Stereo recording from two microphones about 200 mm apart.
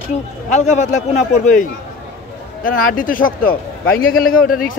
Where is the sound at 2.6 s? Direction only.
45° left (ahead or behind).